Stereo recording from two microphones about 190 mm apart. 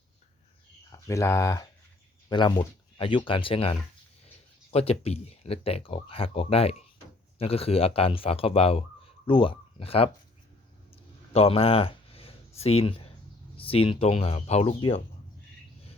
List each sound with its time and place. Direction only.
0.9 s speech: 15° left (ahead or behind)
10.9 s a sound: 30° left (ahead or behind)
13.6 s speech: 30° left (ahead or behind)